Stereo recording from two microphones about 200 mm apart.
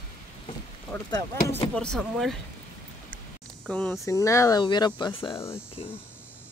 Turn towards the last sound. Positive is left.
turn(degrees=15)  # may be behind; listen again after turning